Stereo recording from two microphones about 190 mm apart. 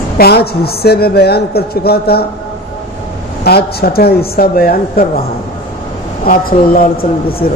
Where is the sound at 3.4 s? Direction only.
55° left (ahead or behind).